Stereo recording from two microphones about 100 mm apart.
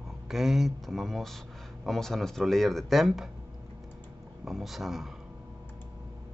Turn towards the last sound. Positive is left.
turn(degrees=0)  # may be behind; listen again after turning